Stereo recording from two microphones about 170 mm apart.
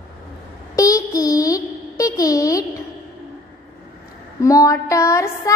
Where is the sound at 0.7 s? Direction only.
20° left (ahead or behind).